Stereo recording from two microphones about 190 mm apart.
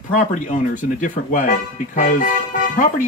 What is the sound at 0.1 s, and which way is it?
Speech, 45° left (ahead or behind).